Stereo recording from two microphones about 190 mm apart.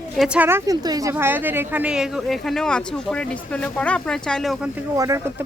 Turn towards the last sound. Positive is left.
turn(degrees=-15)  # may be behind; listen again after turning